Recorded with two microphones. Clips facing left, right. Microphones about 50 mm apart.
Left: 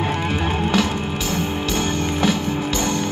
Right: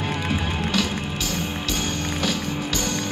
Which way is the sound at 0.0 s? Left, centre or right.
Left.